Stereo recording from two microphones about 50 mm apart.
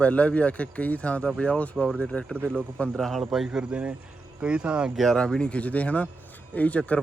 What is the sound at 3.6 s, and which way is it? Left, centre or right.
Speech, right.